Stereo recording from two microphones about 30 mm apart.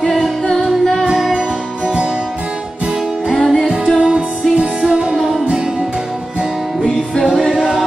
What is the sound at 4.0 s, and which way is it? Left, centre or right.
Music, right.